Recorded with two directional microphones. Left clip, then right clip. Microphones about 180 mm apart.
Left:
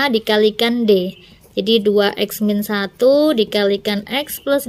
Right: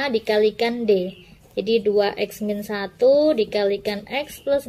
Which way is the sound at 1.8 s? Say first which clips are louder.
Left 4 dB; 50° left (ahead or behind).